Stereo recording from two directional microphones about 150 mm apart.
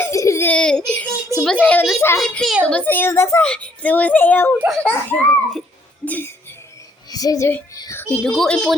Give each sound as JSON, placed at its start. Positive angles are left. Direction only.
{"t": 0.0, "sound": "baby cry", "side_deg": 20}
{"t": 0.9, "sound": "a sound", "side_deg": 5}
{"t": 1.5, "sound": "a child's voice", "side_deg": 5}
{"t": 7.1, "sound": "a child's voice", "side_deg": 25}